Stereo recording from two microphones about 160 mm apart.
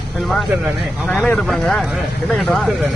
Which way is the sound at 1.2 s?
5° left (ahead or behind).